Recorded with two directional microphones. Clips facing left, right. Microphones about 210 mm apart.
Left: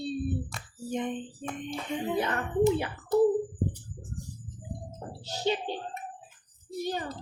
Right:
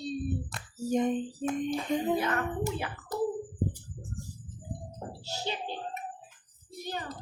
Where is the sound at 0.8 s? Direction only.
40° right (ahead or behind).